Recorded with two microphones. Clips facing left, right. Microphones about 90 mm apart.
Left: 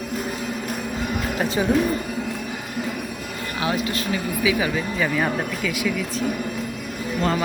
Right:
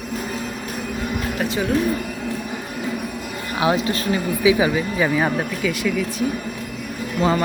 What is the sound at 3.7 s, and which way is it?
Speech, 30° right (ahead or behind).